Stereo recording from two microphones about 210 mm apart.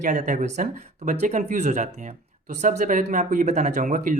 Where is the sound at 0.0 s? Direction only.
35° right (ahead or behind).